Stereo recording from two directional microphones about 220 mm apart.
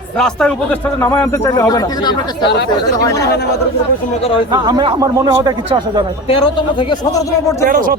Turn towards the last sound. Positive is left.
turn(degrees=-40)  # may be behind; listen again after turning